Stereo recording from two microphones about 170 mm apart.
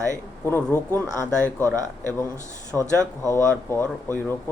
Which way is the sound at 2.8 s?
20° right (ahead or behind).